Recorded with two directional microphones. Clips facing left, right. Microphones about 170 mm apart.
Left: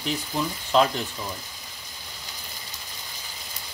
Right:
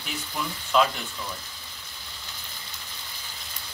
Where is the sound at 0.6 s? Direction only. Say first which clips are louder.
Left 2 dB; 35° left (ahead or behind).